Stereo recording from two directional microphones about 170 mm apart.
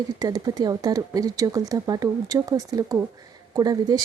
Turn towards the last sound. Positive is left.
turn(degrees=-20)  # may be behind; listen again after turning